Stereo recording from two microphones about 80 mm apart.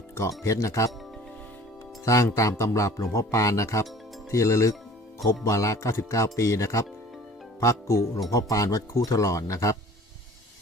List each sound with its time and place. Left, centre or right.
0.1 s speech: left
2.0 s speech: left